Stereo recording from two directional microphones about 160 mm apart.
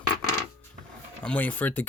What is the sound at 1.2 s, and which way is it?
Speech, 10° left (ahead or behind).